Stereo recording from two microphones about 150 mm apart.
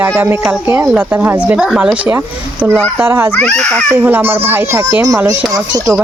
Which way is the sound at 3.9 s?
15° right (ahead or behind).